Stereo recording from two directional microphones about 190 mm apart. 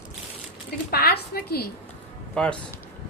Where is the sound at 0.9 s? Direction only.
55° left (ahead or behind).